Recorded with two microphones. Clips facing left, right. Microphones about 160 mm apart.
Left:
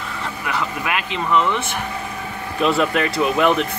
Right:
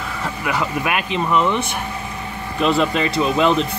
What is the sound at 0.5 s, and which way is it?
Speech, 15° right (ahead or behind).